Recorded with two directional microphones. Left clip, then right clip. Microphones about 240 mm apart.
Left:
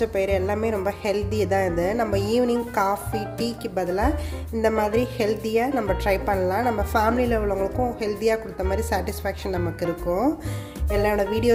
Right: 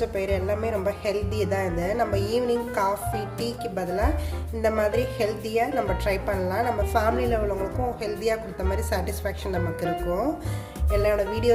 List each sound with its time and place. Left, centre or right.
0.0 s speech: left